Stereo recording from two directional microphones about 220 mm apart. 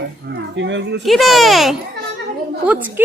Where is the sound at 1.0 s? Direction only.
Centre (ahead or behind).